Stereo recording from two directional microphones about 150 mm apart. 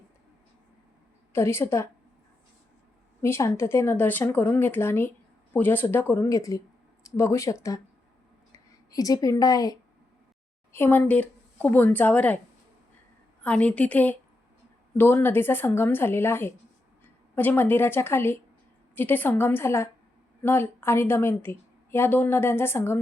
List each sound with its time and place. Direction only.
1.3 s a woman's voice: 15° left (ahead or behind)
3.2 s a woman's voice: 15° left (ahead or behind)
13.4 s a woman's voice: 10° left (ahead or behind)